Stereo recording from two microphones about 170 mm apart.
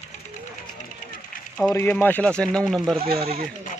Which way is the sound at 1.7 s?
10° left (ahead or behind).